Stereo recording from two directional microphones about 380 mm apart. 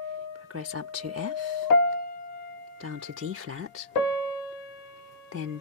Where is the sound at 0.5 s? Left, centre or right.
Right.